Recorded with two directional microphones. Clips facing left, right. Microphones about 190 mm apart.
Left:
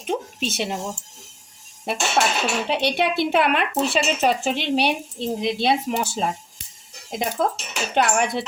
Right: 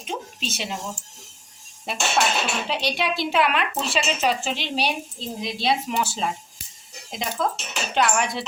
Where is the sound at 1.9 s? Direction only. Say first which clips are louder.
Left 2 dB; 55° left (ahead or behind).